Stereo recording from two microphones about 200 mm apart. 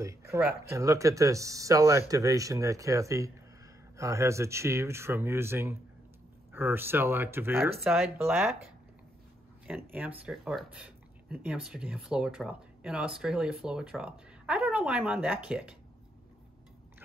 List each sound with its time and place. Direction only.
0.0 s speech: 15° right (ahead or behind)
9.8 s speech: 10° right (ahead or behind)